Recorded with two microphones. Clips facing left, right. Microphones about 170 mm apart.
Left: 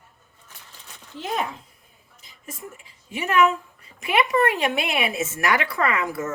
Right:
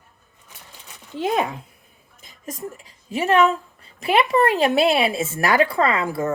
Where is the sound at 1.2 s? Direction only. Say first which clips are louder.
Right 6 dB; 55° right (ahead or behind).